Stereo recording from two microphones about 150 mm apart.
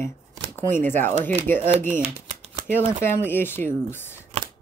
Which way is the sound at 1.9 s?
45° right (ahead or behind).